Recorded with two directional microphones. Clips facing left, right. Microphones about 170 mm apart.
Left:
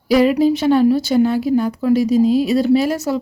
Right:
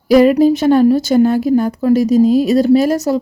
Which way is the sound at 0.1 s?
45° right (ahead or behind).